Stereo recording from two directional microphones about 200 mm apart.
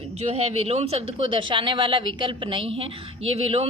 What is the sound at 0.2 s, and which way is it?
A woman's voice, 30° right (ahead or behind).